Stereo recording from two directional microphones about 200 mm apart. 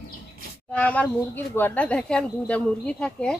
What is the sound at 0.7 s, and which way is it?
Speech, 5° left (ahead or behind).